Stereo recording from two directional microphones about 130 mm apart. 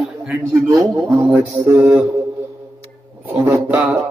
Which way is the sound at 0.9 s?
20° right (ahead or behind).